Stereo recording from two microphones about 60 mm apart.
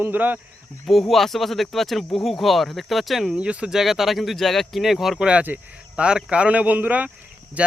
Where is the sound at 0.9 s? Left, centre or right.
Centre.